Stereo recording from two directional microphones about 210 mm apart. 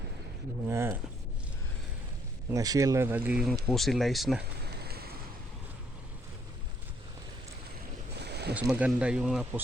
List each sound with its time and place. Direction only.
0.7 s a sound: 10° right (ahead or behind)
2.5 s speech: 15° right (ahead or behind); by 4.4 s centre (ahead or behind)
4.6 s fire: 50° right (ahead or behind)
8.2 s boat: 50° right (ahead or behind)
8.5 s speech: 5° right (ahead or behind)